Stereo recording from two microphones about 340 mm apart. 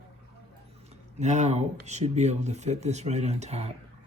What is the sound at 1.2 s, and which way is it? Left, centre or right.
Speech, centre.